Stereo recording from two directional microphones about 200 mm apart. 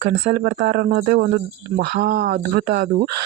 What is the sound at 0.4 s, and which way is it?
Speech, 50° right (ahead or behind).